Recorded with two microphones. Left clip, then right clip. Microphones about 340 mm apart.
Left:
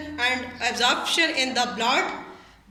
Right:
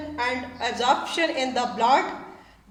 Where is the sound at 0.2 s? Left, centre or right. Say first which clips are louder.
Left 2 dB; right.